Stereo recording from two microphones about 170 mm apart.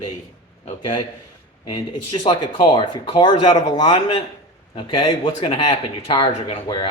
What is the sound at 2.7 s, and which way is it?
Speech, 30° left (ahead or behind).